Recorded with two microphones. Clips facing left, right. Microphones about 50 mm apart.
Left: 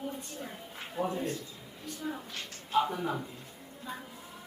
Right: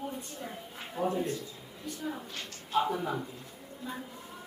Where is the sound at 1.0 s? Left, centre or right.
Left.